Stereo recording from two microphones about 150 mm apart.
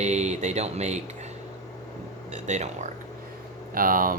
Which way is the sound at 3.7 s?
70° right (ahead or behind).